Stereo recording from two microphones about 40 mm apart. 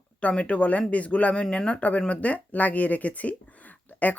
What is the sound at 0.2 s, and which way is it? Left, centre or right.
Speech, left.